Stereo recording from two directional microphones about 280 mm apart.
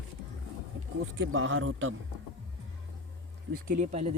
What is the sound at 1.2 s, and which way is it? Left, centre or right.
Speech, right.